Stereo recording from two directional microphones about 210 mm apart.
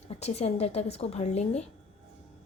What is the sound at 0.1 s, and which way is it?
A woman's voice, 30° left (ahead or behind).